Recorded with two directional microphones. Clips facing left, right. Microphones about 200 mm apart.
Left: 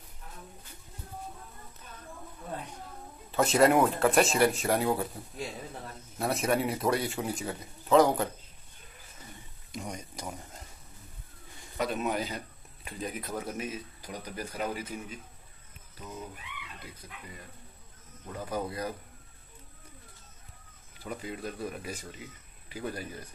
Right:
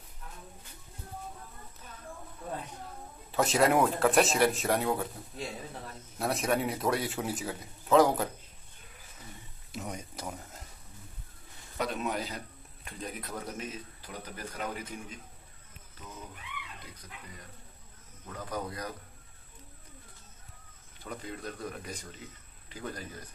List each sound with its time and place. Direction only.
3.3 s a man's voice: centre (ahead or behind)
6.1 s a man's voice: centre (ahead or behind)
9.7 s a sound: 5° right (ahead or behind)
11.8 s a man's voice: centre (ahead or behind)
18.2 s speech: 10° left (ahead or behind)
21.0 s speech: 5° left (ahead or behind)